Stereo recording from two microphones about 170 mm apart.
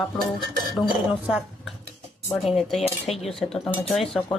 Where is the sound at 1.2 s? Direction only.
5° right (ahead or behind).